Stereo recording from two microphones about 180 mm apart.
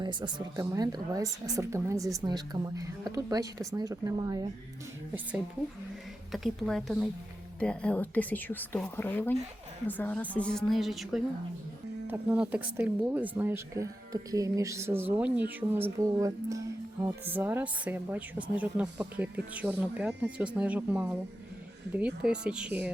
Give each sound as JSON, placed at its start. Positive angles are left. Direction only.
{"t": 0.0, "sound": "a woman's voice", "side_deg": -25}
{"t": 6.3, "sound": "a woman's voice", "side_deg": 0}